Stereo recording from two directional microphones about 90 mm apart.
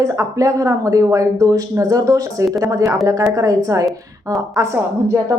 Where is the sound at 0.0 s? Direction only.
40° right (ahead or behind).